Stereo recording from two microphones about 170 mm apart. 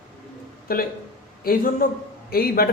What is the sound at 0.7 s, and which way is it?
Speech, 60° left (ahead or behind).